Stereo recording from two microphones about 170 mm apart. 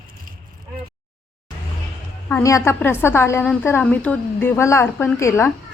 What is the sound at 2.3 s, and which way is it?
A woman's voice, 15° left (ahead or behind).